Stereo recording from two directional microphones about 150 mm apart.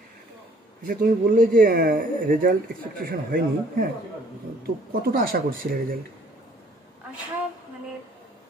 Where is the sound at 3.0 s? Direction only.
80° right.